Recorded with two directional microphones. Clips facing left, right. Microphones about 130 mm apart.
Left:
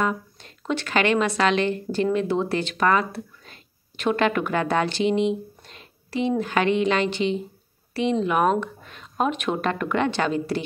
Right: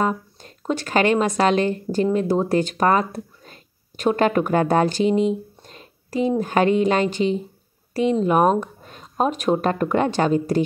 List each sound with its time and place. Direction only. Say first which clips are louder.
0.0 s speech: right 3 dB; 40° right (ahead or behind)